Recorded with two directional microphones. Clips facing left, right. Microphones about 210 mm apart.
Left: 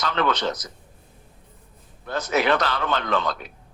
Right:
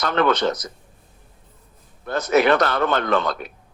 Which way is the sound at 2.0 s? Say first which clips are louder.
Right 5 dB; 50° right (ahead or behind).